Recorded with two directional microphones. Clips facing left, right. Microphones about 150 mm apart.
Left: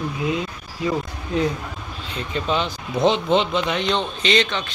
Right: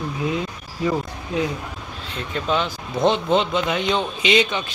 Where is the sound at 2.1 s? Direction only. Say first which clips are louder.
Even; centre (ahead or behind).